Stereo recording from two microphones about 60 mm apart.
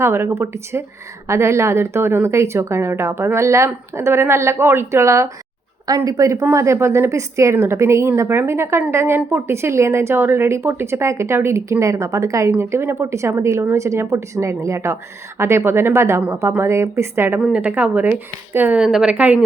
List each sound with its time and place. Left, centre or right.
0.0 s speech: right
6.1 s speech: right
6.5 s speech: right
12.5 s speech: right
17.5 s speech: right
18.8 s speech: centre
19.0 s speech: right